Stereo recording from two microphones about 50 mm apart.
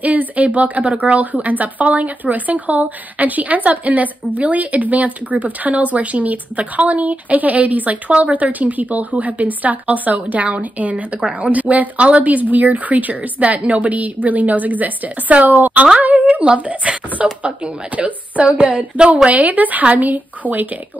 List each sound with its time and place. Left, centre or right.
0.0 s speech: right